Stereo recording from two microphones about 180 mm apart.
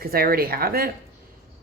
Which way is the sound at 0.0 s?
55° right (ahead or behind).